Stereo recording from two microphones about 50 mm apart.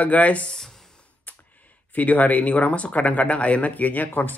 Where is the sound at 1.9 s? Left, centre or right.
Left.